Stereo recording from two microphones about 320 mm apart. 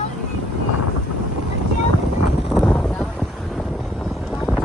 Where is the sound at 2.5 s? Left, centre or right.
Centre.